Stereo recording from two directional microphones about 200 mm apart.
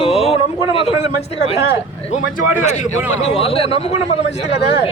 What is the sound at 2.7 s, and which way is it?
A man's voice, 35° left (ahead or behind).